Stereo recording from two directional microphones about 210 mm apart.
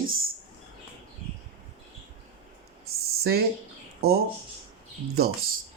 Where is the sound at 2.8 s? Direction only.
50° right (ahead or behind).